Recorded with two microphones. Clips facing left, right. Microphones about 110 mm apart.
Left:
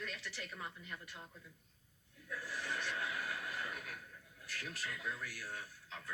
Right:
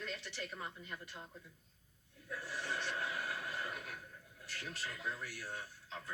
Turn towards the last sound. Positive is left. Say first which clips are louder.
# right 2 dB
turn(degrees=-30)  # may be behind; listen again after turning